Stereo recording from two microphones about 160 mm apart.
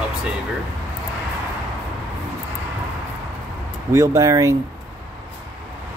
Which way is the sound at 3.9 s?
20° right (ahead or behind).